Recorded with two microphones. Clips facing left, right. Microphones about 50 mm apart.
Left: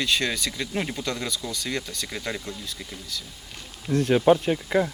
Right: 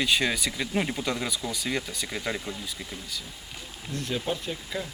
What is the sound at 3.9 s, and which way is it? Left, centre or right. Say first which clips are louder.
Speech: left 12 dB; left.